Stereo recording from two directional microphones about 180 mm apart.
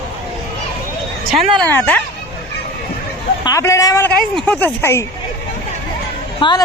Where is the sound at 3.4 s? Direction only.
15° left (ahead or behind).